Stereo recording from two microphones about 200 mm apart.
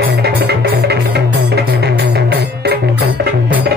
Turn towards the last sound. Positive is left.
turn(degrees=-55)  # may be behind; listen again after turning